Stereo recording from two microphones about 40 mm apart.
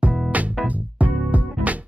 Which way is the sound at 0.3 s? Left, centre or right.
Right.